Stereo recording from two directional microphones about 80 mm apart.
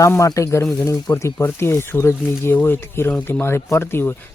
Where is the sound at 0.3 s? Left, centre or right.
Left.